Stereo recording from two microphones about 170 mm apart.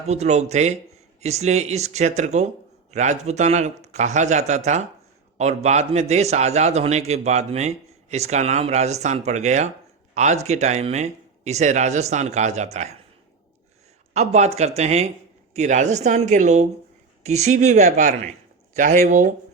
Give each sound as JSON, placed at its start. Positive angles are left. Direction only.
{"t": 0.1, "sound": "a man's voice", "side_deg": -40}
{"t": 14.1, "sound": "a man's voice", "side_deg": -40}